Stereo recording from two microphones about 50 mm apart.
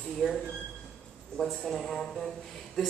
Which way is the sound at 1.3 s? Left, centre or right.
Centre.